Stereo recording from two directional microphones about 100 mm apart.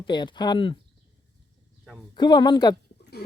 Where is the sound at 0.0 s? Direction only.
50° left (ahead or behind).